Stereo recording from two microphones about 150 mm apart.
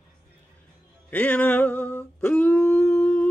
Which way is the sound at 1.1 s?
10° left (ahead or behind).